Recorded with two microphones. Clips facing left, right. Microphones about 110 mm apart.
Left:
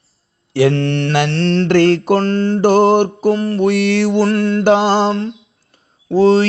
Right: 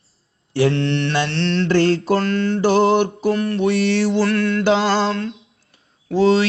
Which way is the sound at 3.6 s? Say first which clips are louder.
Left 3 dB; 65° left (ahead or behind).